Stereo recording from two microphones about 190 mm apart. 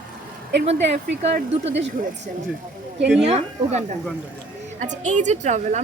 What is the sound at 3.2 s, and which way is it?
A woman's voice, 35° right (ahead or behind).